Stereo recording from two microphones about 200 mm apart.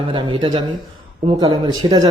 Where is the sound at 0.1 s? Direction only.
25° right (ahead or behind).